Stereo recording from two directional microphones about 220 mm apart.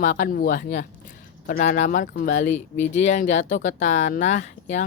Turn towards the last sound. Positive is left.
turn(degrees=30)  # may be behind; listen again after turning